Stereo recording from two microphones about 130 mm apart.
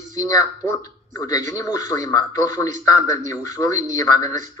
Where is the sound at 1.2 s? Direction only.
25° left (ahead or behind).